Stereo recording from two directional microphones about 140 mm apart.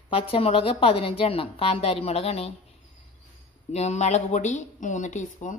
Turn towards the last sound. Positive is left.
turn(degrees=60)  # may be behind; listen again after turning